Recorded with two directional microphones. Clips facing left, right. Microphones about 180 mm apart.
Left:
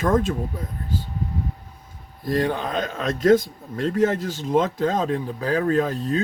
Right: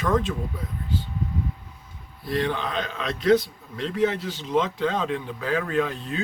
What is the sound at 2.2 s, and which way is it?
A man's voice, 45° left (ahead or behind).